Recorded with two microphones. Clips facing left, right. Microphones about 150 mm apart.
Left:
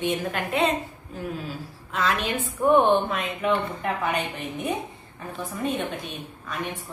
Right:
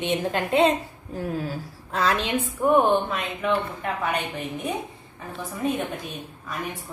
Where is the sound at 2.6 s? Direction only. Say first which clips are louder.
Left 1 dB; centre (ahead or behind).